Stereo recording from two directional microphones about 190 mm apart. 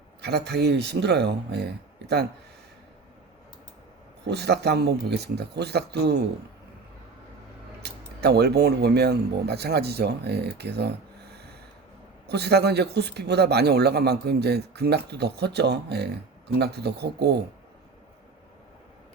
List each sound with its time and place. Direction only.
0.2 s speech: 60° right (ahead or behind)
4.3 s speech: 60° right (ahead or behind)
7.8 s speech: 60° right (ahead or behind)
12.3 s speech: 60° right (ahead or behind)